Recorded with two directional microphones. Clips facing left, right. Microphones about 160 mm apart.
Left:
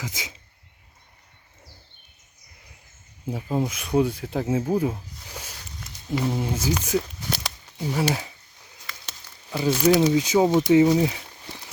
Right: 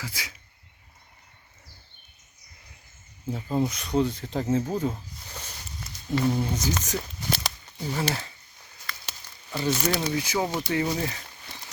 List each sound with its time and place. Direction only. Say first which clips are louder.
0.0 s speech: left 3 dB; 20° left (ahead or behind)
3.2 s speech: left 1 dB; 10° left (ahead or behind)
9.5 s speech: left 7 dB; 10° left (ahead or behind)